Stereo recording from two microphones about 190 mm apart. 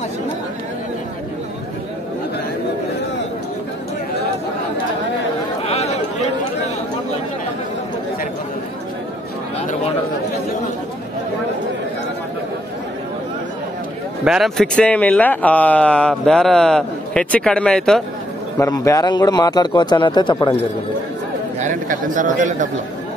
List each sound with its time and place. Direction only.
5.6 s chatter: 35° left (ahead or behind)
14.2 s speech: centre (ahead or behind)
18.6 s a man's voice: 15° left (ahead or behind)
21.5 s speech: 45° right (ahead or behind)